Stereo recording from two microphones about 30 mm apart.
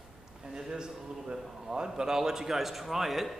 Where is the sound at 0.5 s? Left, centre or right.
Right.